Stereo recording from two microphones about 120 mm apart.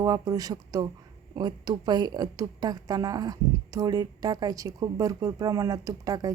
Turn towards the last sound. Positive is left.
turn(degrees=-30)  # may be behind; listen again after turning